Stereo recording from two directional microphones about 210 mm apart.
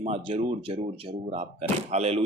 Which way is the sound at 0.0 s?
25° right (ahead or behind).